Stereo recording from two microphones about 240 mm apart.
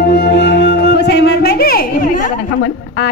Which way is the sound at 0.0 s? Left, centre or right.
Left.